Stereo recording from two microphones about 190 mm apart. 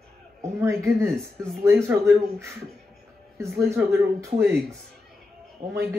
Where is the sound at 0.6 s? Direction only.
15° right (ahead or behind).